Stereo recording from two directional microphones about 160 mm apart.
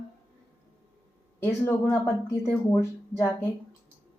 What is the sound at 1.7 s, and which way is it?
A woman's voice, 20° left (ahead or behind).